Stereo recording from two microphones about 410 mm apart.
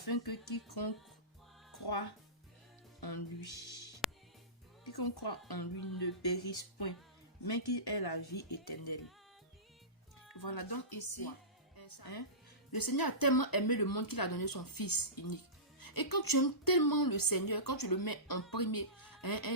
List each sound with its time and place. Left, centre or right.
0.0 s speech: left
3.0 s music: left
4.0 s music: centre
4.9 s speech: left
10.4 s a woman's voice: left